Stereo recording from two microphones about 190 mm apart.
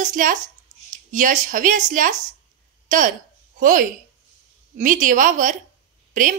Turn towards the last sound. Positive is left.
turn(degrees=-45)  # may be behind; listen again after turning